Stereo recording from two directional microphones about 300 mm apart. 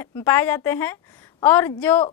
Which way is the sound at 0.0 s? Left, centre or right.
Centre.